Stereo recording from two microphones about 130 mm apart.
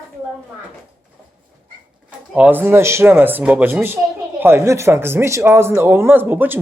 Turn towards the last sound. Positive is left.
turn(degrees=-15)  # may be behind; listen again after turning